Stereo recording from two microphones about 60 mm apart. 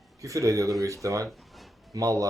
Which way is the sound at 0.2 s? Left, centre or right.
Right.